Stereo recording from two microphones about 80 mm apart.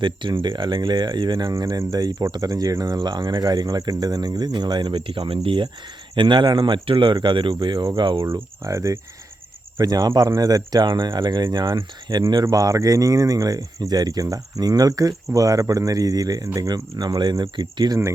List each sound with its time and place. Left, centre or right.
0.0 s speech: right
3.0 s speech: right
6.1 s speech: right
8.2 s cricket: right
9.8 s speech: right
12.5 s speech: right